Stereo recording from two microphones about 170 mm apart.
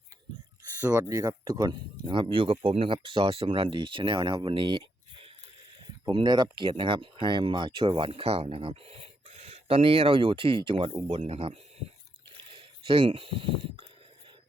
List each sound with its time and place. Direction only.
0.8 s speech: 15° right (ahead or behind)